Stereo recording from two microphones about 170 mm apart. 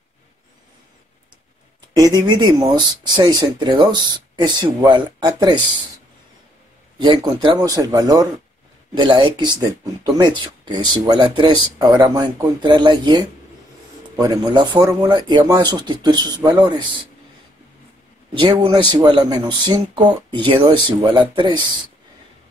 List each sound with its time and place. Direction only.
1.8 s speech: 20° right (ahead or behind)
7.0 s speech: 25° right (ahead or behind)
18.3 s speech: 30° right (ahead or behind)